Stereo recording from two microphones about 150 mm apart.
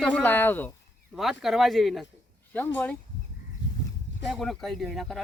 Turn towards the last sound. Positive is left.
turn(degrees=0)  # may be behind; listen again after turning